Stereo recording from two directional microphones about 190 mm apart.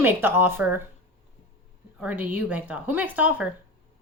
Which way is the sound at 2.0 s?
10° right (ahead or behind).